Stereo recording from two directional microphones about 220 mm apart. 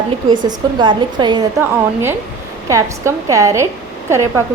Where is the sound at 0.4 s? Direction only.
20° right (ahead or behind).